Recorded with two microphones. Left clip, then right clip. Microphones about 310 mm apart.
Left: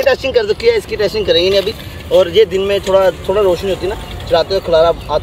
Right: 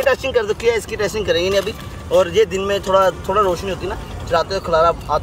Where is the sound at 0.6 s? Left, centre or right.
Right.